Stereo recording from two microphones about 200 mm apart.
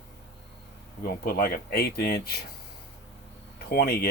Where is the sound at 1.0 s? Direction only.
50° left (ahead or behind).